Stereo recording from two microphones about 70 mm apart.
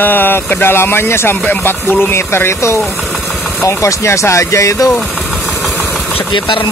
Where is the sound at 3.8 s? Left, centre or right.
Left.